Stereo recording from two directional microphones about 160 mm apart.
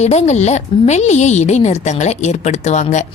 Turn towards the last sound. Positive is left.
turn(degrees=45)  # may be behind; listen again after turning